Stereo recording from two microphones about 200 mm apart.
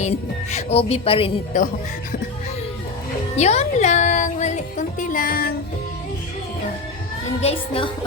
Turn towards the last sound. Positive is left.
turn(degrees=30)  # may be behind; listen again after turning